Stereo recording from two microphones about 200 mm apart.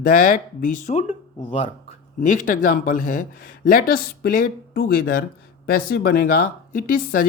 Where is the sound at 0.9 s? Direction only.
30° left (ahead or behind).